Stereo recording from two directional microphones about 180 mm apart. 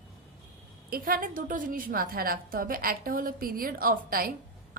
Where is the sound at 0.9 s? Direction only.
50° right (ahead or behind).